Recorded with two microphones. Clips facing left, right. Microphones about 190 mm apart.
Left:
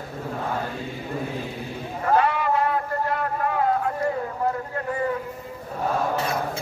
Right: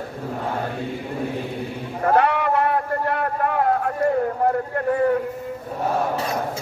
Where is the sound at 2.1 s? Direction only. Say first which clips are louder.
Right 2 dB; 65° right (ahead or behind).